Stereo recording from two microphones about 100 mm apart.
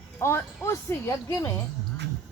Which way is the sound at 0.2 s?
25° left (ahead or behind).